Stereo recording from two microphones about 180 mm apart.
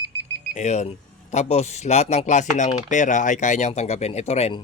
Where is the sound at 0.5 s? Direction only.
40° left (ahead or behind).